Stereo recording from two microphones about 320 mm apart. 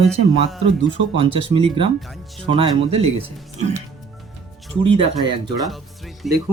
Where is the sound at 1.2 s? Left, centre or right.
Centre.